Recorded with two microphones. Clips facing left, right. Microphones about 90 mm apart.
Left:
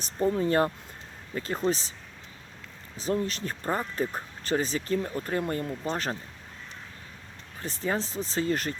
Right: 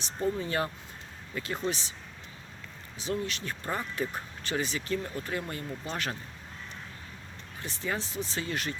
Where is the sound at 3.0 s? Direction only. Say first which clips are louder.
Left 4 dB; 40° left (ahead or behind).